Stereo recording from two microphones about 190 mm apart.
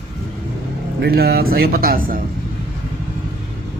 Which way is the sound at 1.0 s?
55° right (ahead or behind).